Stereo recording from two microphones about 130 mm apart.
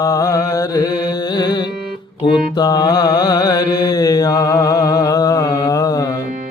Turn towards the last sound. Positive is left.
turn(degrees=25)  # may be behind; listen again after turning